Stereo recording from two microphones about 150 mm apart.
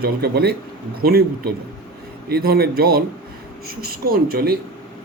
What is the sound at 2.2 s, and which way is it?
Speech, 90° right.